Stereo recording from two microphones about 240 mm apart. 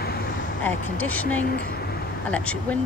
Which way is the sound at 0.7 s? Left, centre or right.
Centre.